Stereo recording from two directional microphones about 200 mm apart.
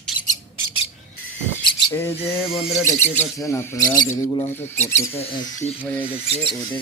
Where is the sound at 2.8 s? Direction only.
10° left (ahead or behind).